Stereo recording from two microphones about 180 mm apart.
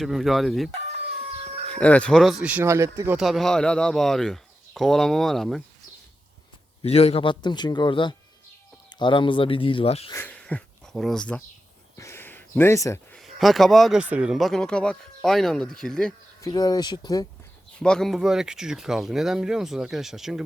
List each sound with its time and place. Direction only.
0.0 s speech: centre (ahead or behind)
0.7 s chicken: 35° right (ahead or behind)
1.7 s speech: 5° left (ahead or behind); by 3.2 s 15° right (ahead or behind)
3.2 s speech: centre (ahead or behind)
6.8 s speech: 35° left (ahead or behind)
10.1 s speech: 10° left (ahead or behind)
11.9 s a sound: 15° left (ahead or behind)
13.1 s speech: centre (ahead or behind)
16.4 s speech: 20° left (ahead or behind)
17.7 s speech: 5° left (ahead or behind)